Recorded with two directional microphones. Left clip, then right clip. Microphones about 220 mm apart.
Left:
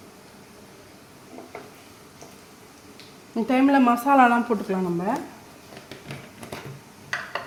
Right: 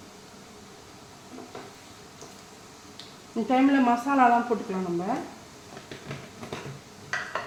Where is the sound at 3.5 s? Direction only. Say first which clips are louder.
Left 3 dB; 40° left (ahead or behind).